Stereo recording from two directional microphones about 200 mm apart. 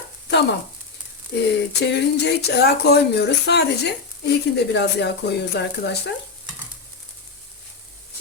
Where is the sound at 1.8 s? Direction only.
55° left (ahead or behind).